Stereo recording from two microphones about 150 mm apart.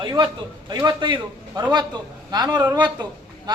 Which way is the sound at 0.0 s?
30° right (ahead or behind).